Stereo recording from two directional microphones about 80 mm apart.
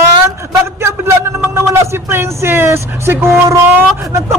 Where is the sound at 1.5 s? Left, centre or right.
Right.